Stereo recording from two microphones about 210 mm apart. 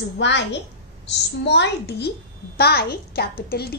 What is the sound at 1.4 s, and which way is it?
A child's voice, 55° left (ahead or behind).